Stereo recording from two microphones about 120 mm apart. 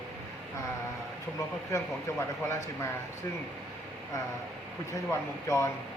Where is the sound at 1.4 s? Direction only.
25° left (ahead or behind).